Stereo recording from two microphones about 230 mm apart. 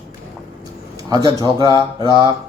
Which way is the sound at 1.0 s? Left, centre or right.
Centre.